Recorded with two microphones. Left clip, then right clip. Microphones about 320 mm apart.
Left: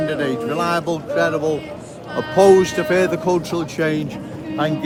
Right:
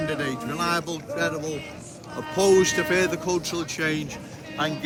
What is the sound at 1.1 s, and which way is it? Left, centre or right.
Speech, left.